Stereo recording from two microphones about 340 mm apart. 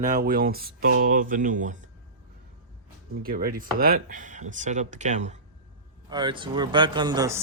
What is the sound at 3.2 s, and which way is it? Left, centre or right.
Speech, right.